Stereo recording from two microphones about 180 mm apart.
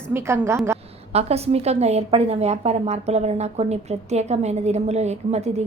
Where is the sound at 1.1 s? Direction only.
35° right (ahead or behind).